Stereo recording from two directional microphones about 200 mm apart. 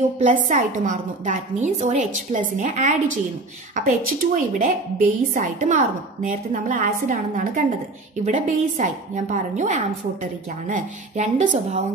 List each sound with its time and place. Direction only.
0.2 s a woman's voice: 40° right (ahead or behind)